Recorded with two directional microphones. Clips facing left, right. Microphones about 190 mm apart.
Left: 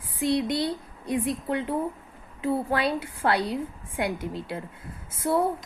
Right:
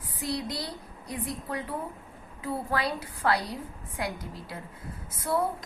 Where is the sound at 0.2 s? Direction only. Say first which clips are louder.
Left 8 dB; 25° left (ahead or behind).